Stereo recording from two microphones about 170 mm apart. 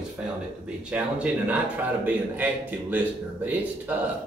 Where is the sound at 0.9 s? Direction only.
5° right (ahead or behind).